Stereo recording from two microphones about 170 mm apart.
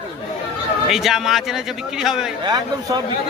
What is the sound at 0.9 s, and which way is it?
Speech, centre (ahead or behind).